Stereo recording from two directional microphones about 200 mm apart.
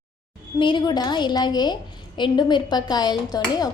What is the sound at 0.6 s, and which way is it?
A woman's voice, 20° left (ahead or behind).